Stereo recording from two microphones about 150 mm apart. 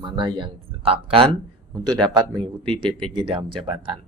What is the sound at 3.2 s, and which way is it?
Speech, 35° right (ahead or behind).